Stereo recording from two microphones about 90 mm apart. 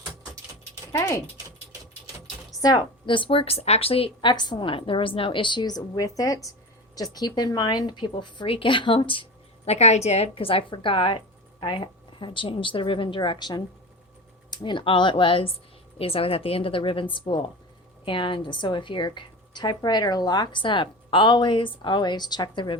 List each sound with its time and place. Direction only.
2.6 s a woman's voice: 45° left (ahead or behind)
3.1 s a woman's voice: 80° left
10.3 s a woman's voice: 90° left; by 13.5 s 60° left (ahead or behind)
14.5 s a woman's voice: 65° left (ahead or behind)
16.0 s a woman's voice: 90° left; by 22.8 s 60° left (ahead or behind)